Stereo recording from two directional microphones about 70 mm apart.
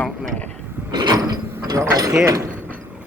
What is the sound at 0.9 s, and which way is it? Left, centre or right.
Mechanisms, right.